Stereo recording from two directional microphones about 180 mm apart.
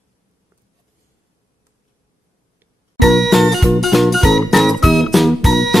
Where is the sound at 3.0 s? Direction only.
Centre (ahead or behind).